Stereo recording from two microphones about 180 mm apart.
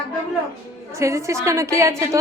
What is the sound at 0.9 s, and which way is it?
A woman's voice, 15° right (ahead or behind).